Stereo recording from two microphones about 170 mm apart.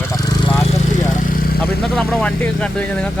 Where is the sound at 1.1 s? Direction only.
60° left (ahead or behind).